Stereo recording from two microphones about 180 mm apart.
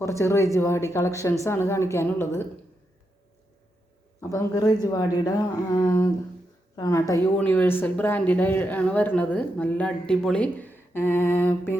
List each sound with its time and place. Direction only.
0.0 s speech: 15° left (ahead or behind)
4.2 s speech: 15° left (ahead or behind)